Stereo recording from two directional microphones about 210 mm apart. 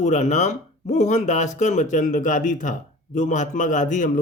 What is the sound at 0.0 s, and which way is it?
A man's voice, 35° left (ahead or behind).